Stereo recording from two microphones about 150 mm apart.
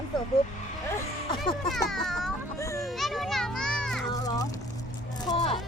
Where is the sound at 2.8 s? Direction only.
Centre (ahead or behind).